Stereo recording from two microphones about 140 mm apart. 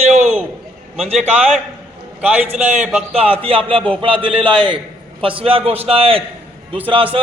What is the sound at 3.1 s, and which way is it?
Music, 40° right (ahead or behind).